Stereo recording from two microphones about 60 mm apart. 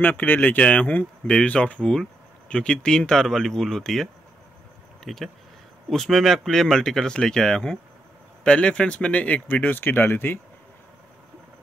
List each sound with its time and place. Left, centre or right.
0.0 s speech: left